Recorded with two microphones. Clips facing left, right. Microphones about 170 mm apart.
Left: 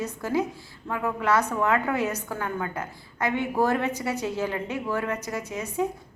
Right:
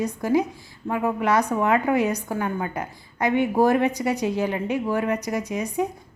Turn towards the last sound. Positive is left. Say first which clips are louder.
# right 3 dB
turn(degrees=-15)  # may be behind; listen again after turning